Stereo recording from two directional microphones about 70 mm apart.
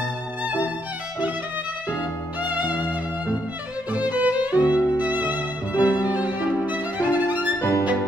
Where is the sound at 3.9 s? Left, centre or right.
Right.